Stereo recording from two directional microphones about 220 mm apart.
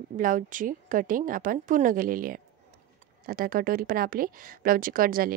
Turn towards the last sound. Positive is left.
turn(degrees=-40)  # may be behind; listen again after turning